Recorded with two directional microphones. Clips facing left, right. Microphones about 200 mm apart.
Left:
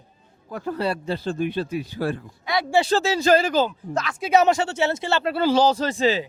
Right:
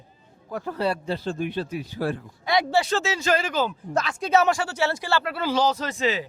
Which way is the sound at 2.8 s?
35° left (ahead or behind).